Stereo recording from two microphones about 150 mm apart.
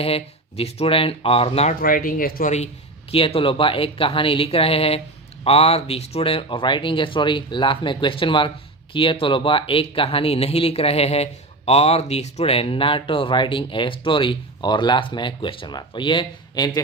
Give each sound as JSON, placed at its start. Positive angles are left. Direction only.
{"t": 0.0, "sound": "speech", "side_deg": 40}
{"t": 1.8, "sound": "speech", "side_deg": 70}
{"t": 3.1, "sound": "speech", "side_deg": 40}